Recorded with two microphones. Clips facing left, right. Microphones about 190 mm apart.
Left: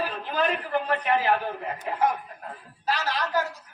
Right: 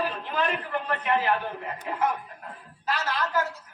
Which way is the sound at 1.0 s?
35° left (ahead or behind).